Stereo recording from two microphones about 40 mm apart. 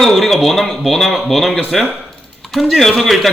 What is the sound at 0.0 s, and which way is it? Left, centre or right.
A man's voice, centre.